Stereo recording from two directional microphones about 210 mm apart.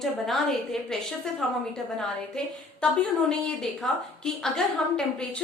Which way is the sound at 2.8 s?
5° left (ahead or behind).